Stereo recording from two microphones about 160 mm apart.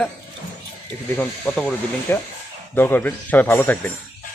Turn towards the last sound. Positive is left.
turn(degrees=10)  # may be behind; listen again after turning